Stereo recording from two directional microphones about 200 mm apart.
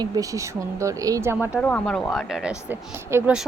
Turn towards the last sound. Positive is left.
turn(degrees=-10)  # may be behind; listen again after turning